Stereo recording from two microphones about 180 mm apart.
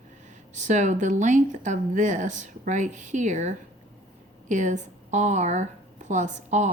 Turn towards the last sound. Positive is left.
turn(degrees=-40)  # may be behind; listen again after turning